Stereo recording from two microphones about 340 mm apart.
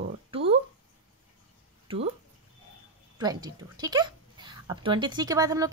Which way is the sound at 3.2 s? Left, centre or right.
Centre.